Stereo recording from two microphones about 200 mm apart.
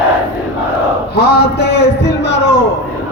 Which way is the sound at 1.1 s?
55° left (ahead or behind).